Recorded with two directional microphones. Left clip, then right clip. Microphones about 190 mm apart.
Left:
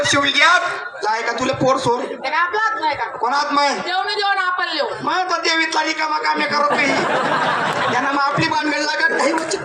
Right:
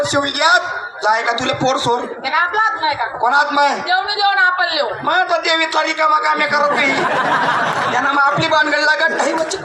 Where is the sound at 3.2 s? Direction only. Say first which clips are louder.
Right 4 dB; 25° right (ahead or behind).